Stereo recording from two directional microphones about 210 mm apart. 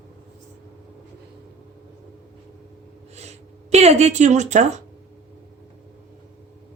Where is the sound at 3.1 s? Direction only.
30° right (ahead or behind).